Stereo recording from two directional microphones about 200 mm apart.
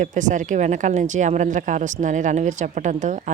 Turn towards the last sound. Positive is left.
turn(degrees=-40)  # may be behind; listen again after turning